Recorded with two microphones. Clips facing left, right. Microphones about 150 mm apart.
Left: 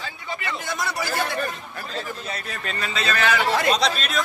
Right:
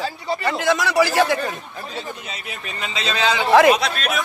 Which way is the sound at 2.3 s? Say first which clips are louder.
Left 2 dB; 15° right (ahead or behind).